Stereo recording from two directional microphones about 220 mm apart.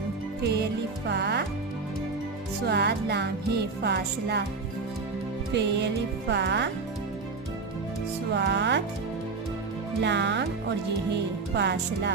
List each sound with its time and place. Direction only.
1.0 s music: 50° right (ahead or behind)
2.6 s music: 50° right (ahead or behind)
5.5 s music: 50° right (ahead or behind)
8.3 s music: 50° right (ahead or behind)
10.0 s music: 50° right (ahead or behind)
11.5 s music: 50° right (ahead or behind)